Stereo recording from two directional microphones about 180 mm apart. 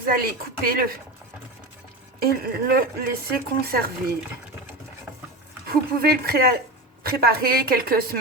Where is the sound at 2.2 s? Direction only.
60° right (ahead or behind).